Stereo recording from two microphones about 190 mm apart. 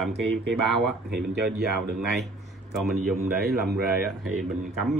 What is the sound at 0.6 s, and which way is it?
Speech, centre (ahead or behind).